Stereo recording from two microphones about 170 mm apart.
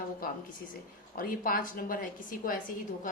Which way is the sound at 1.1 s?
55° left (ahead or behind).